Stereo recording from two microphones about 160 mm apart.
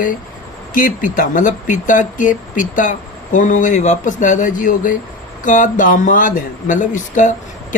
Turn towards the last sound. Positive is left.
turn(degrees=50)  # may be behind; listen again after turning